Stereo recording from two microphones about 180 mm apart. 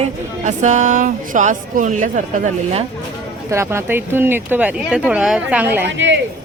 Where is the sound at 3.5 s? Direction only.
15° right (ahead or behind).